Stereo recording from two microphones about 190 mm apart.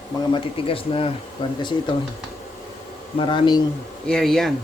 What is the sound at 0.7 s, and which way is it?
Speech, 30° left (ahead or behind).